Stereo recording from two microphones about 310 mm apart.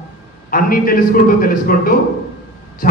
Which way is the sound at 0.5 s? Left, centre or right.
Left.